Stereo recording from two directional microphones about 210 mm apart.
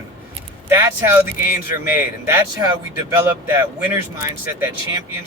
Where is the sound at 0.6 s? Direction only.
10° right (ahead or behind).